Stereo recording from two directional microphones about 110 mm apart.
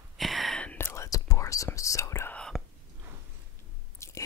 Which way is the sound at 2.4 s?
5° left (ahead or behind).